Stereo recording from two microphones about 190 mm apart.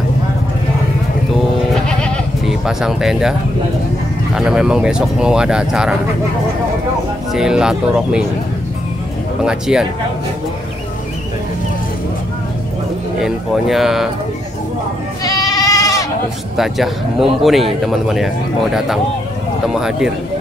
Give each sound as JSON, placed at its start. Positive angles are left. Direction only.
{"t": 2.0, "sound": "sheep", "side_deg": 0}
{"t": 4.4, "sound": "speech", "side_deg": -5}
{"t": 7.3, "sound": "speech", "side_deg": -5}
{"t": 9.4, "sound": "speech", "side_deg": -5}
{"t": 13.2, "sound": "speech", "side_deg": 0}
{"t": 15.2, "sound": "goat", "side_deg": 20}
{"t": 16.5, "sound": "speech", "side_deg": 0}